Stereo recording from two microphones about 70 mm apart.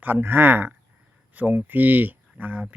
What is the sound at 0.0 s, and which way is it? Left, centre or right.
Speech, right.